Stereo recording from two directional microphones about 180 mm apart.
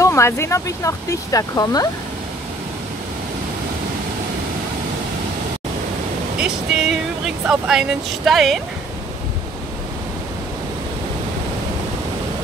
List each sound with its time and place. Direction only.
0.0 s speech: 15° left (ahead or behind)
6.3 s speech: 5° right (ahead or behind)